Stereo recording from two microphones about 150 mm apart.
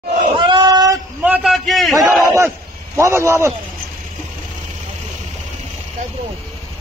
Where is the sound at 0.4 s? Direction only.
30° right (ahead or behind).